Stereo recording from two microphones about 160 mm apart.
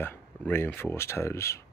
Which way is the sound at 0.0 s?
15° left (ahead or behind).